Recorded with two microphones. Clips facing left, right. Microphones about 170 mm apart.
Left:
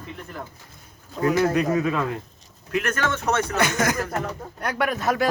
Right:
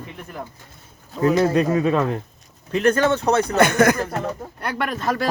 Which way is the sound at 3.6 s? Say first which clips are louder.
Right 10 dB; 60° right (ahead or behind).